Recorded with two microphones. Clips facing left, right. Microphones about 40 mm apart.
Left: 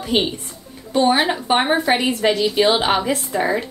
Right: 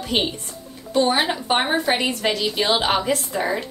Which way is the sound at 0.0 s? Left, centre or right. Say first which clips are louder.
Left 3 dB; centre.